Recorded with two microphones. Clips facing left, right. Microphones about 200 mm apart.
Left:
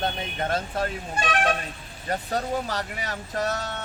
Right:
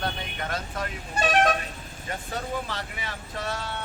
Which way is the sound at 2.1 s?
40° left (ahead or behind).